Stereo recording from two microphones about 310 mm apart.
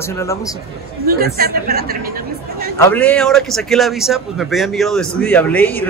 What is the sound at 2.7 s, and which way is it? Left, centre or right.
A man's voice, centre.